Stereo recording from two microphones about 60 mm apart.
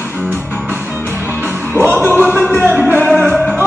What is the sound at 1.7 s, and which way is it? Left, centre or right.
Music, right.